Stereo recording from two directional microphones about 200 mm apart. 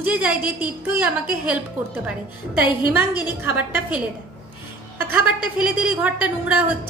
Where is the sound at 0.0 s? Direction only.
5° right (ahead or behind).